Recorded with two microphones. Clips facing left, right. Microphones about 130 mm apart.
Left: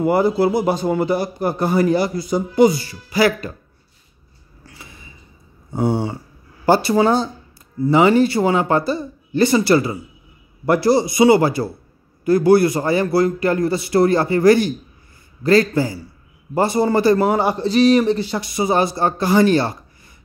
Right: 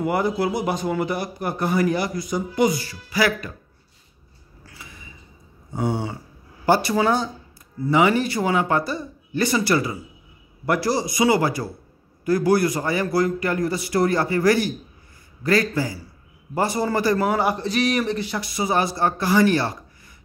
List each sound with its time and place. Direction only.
0.0 s a man's voice: 30° left (ahead or behind)
5.7 s a sound: 30° left (ahead or behind)
6.6 s a man's voice: 30° left (ahead or behind)